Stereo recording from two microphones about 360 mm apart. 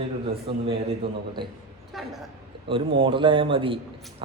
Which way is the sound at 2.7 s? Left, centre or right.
Centre.